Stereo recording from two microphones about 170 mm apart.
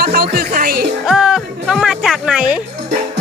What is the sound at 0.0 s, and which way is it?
Music, 65° right (ahead or behind).